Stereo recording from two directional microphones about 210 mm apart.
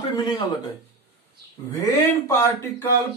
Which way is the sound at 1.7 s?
15° left (ahead or behind).